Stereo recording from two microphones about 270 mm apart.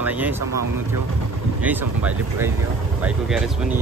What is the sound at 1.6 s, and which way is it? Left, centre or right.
Speech, centre.